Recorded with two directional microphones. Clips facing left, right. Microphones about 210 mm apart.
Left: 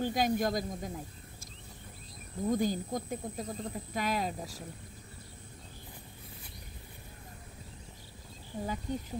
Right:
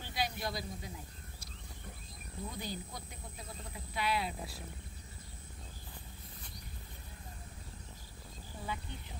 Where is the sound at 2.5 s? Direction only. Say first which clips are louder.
Left 14 dB; 45° left (ahead or behind).